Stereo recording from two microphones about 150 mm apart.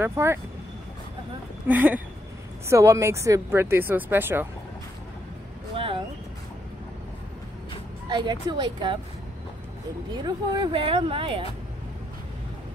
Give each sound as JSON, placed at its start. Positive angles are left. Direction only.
{"t": 0.0, "sound": "speech", "side_deg": -15}
{"t": 1.7, "sound": "speech", "side_deg": -10}
{"t": 5.8, "sound": "a sound", "side_deg": -35}
{"t": 8.1, "sound": "speech", "side_deg": -30}
{"t": 10.1, "sound": "speech", "side_deg": -25}